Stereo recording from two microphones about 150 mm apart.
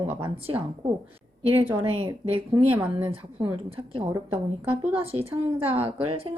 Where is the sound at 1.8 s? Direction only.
40° right (ahead or behind).